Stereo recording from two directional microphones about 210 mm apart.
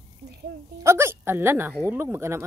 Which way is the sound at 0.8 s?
10° right (ahead or behind).